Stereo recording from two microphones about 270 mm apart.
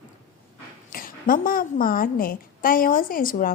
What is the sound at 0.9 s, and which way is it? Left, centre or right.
A woman's voice, left.